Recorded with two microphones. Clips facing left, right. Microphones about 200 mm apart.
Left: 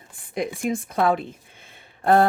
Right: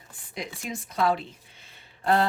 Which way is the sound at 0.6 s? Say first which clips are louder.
Left 4 dB; 55° left (ahead or behind).